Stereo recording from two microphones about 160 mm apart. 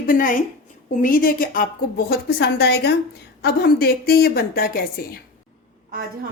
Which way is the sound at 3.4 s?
75° left (ahead or behind).